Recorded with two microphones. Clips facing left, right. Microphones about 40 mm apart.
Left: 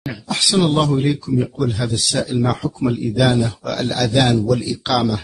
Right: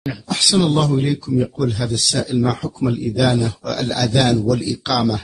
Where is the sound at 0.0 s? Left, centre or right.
Centre.